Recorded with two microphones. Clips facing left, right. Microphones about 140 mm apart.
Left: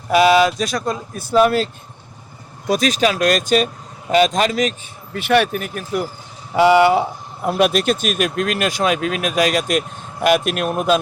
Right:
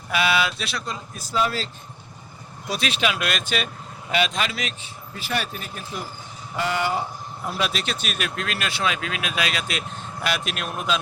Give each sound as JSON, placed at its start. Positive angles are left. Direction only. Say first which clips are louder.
{"t": 0.1, "sound": "speech", "louder": "left 10 dB", "side_deg": 40}
{"t": 2.6, "sound": "speech", "louder": "left 8 dB", "side_deg": 40}
{"t": 5.1, "sound": "speech", "louder": "left 12 dB", "side_deg": 65}
{"t": 6.6, "sound": "speech", "louder": "left 12 dB", "side_deg": 75}
{"t": 7.4, "sound": "speech", "louder": "left 11 dB", "side_deg": 55}